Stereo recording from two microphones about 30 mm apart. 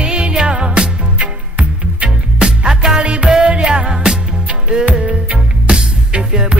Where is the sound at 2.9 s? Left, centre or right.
Right.